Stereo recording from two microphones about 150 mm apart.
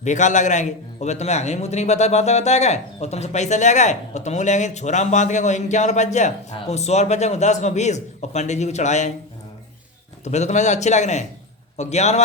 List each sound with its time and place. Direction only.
0.0 s a man's voice: 55° left (ahead or behind)
10.2 s a man's voice: 50° left (ahead or behind)